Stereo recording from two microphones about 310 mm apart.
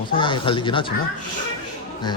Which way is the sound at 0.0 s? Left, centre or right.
Centre.